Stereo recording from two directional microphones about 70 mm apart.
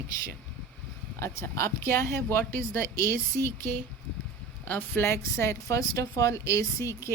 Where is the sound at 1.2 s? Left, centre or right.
Left.